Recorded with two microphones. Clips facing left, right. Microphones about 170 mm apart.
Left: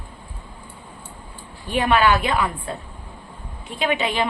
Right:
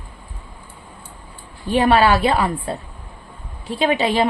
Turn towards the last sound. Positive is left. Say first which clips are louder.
# right 5 dB
turn(degrees=-35)  # may be behind; listen again after turning